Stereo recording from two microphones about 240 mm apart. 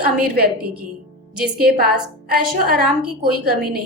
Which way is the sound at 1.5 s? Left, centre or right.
Right.